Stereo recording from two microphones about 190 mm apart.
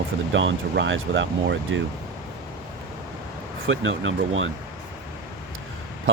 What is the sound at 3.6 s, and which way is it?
Speech, 90° right.